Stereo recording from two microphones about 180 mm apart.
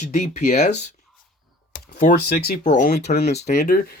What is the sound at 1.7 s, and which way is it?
Computer keyboard, 45° left (ahead or behind).